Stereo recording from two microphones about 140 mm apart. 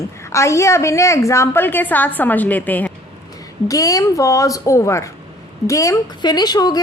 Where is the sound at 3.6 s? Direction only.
25° left (ahead or behind).